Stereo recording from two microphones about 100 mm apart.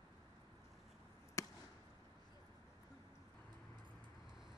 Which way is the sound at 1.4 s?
30° left (ahead or behind).